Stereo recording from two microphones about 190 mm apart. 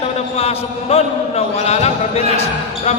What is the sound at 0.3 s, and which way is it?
A man's voice, 30° left (ahead or behind).